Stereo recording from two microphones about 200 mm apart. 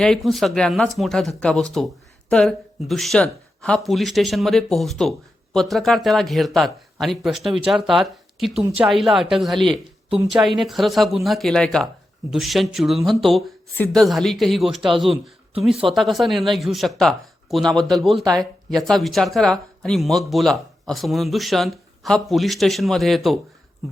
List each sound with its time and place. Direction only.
0.0 s speech: centre (ahead or behind)